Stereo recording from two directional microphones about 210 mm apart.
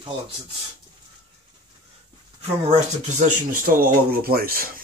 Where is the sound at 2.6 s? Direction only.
35° right (ahead or behind).